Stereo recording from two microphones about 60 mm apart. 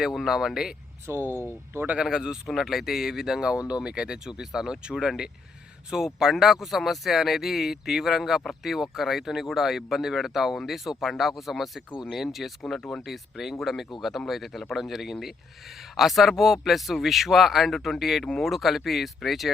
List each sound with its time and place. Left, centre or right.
0.0 s speech: centre
1.0 s speech: right
2.0 s speech: centre